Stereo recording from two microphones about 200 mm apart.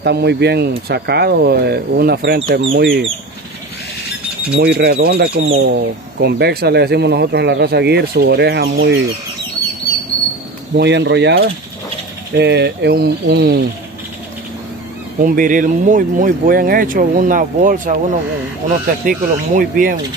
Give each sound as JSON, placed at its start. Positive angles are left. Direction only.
{"t": 0.0, "sound": "speech", "side_deg": -55}
{"t": 2.7, "sound": "speech", "side_deg": -65}
{"t": 4.6, "sound": "speech", "side_deg": -55}
{"t": 10.8, "sound": "speech", "side_deg": -60}
{"t": 15.1, "sound": "speech", "side_deg": -40}